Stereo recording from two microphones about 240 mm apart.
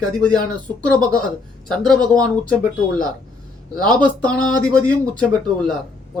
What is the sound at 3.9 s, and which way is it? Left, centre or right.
Speech, centre.